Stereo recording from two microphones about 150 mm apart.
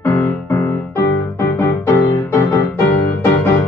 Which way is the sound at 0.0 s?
15° left (ahead or behind).